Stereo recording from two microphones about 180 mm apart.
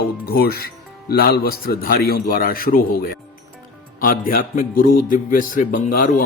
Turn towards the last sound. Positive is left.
turn(degrees=50)  # may be behind; listen again after turning